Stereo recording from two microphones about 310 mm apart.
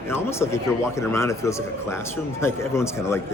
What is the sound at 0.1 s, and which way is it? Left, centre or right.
A man's voice, centre.